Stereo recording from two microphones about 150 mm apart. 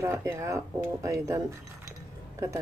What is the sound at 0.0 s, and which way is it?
Speech, 15° right (ahead or behind).